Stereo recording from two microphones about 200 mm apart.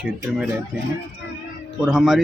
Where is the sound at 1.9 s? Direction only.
Centre (ahead or behind).